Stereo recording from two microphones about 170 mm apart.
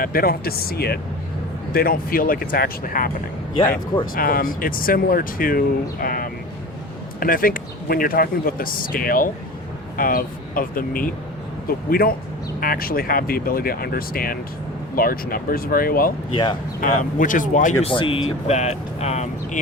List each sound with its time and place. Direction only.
0.0 s speech: 60° left (ahead or behind)
4.1 s speech: 55° left (ahead or behind)
16.3 s speech: 30° left (ahead or behind)
16.8 s speech: 50° left (ahead or behind)
17.8 s speech: 30° left (ahead or behind)